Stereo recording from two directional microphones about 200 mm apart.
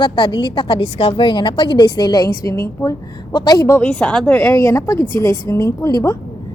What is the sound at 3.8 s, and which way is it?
A woman's voice, 5° left (ahead or behind).